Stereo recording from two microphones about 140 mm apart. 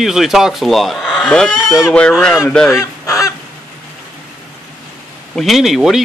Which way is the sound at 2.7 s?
25° left (ahead or behind).